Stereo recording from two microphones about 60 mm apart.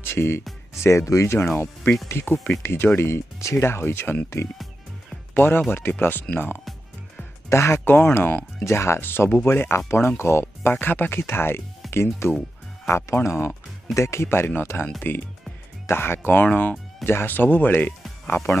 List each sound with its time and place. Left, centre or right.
0.1 s speech: left
0.8 s speech: left
3.5 s speech: left
5.3 s speech: left
7.5 s speech: left
10.7 s speech: left
17.0 s speech: left